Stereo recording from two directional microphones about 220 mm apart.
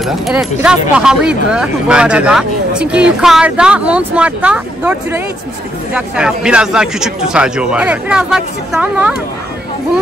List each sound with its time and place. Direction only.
0.0 s speech: 5° right (ahead or behind)